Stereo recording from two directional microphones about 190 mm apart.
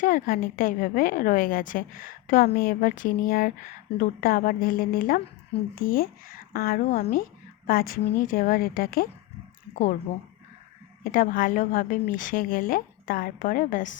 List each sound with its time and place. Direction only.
0.0 s a woman's voice: 45° left (ahead or behind)
11.0 s a woman's voice: 45° left (ahead or behind)